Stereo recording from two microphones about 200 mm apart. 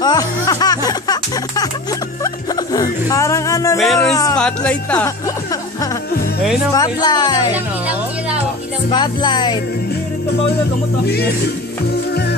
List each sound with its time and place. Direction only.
0.0 s speech: 20° left (ahead or behind)
2.2 s music: 15° left (ahead or behind)
3.7 s speech: centre (ahead or behind)
4.0 s speech: 15° left (ahead or behind)
4.4 s speech: 5° left (ahead or behind)
6.7 s music: 20° left (ahead or behind)
8.9 s music: 20° left (ahead or behind)
11.1 s speech: 55° left (ahead or behind)